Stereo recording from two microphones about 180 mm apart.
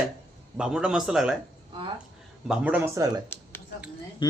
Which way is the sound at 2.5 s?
10° right (ahead or behind).